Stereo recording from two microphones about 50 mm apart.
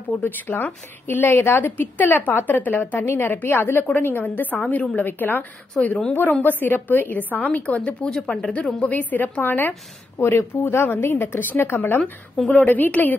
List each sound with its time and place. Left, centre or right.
0.2 s a woman's voice: left
5.7 s speech: left
6.4 s a woman's voice: left
8.1 s speech: centre
8.8 s a woman's voice: left
10.1 s a woman's voice: left
12.0 s speech: centre
12.5 s a woman's voice: left